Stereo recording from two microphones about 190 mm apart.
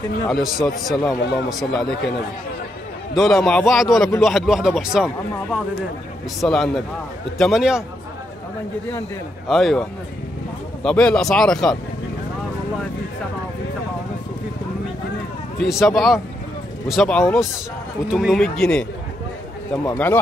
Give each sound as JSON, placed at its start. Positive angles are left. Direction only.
{"t": 0.3, "sound": "speech", "side_deg": 0}
{"t": 3.2, "sound": "speech", "side_deg": 0}
{"t": 9.5, "sound": "speech", "side_deg": 0}
{"t": 15.6, "sound": "a man's voice", "side_deg": 0}